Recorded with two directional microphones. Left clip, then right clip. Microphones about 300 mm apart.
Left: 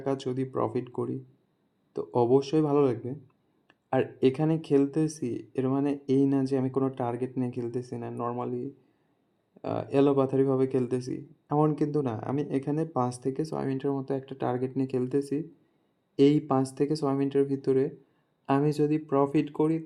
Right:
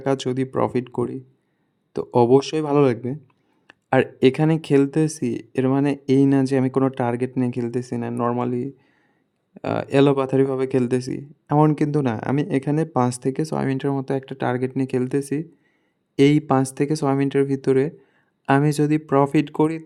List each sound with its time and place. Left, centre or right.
0.0 s speech: right